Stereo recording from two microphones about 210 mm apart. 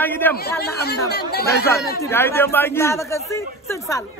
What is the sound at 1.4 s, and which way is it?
A man's voice, 15° left (ahead or behind).